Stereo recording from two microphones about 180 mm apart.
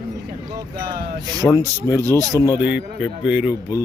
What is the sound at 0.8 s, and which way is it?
Speech, 60° right (ahead or behind).